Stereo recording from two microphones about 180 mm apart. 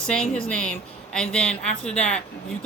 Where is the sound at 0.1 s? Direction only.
5° left (ahead or behind).